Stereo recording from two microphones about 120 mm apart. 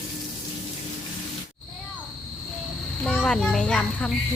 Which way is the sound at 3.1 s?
5° left (ahead or behind).